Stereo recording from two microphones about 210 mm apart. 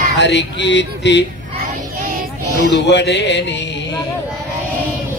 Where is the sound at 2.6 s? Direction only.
55° left (ahead or behind).